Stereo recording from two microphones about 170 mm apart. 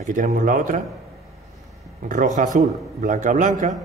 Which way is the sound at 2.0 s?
50° right (ahead or behind).